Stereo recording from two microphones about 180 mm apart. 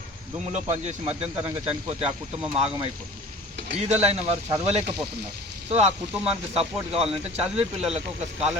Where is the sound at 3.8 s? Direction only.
35° right (ahead or behind).